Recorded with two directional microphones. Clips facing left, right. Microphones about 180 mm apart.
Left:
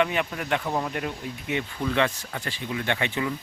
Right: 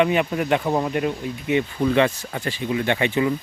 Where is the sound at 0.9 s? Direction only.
5° right (ahead or behind).